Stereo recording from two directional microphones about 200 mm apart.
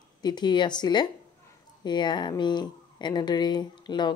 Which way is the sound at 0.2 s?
20° left (ahead or behind).